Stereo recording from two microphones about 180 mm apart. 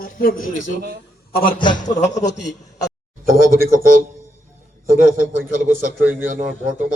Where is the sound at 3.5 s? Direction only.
55° right (ahead or behind).